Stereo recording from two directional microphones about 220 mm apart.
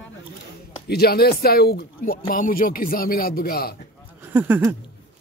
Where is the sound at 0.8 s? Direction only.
45° left (ahead or behind).